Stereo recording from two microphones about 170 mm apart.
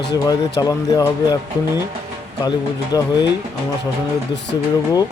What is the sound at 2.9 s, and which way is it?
Speech, 25° left (ahead or behind).